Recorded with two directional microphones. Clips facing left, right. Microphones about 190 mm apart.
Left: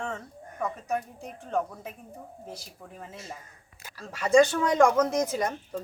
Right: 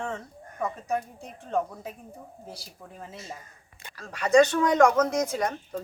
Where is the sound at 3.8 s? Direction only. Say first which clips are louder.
Right 1 dB; 5° left (ahead or behind).